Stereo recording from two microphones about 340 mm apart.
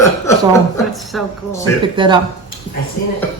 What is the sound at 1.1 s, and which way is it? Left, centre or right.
Speech, centre.